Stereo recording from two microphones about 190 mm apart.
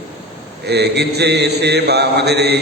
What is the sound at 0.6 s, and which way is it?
A man's voice, 60° right (ahead or behind).